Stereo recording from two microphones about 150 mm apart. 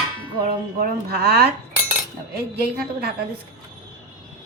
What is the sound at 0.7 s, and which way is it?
A woman's voice, 90° right.